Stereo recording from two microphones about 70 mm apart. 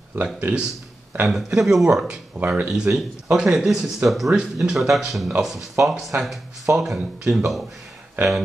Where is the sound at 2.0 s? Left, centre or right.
Centre.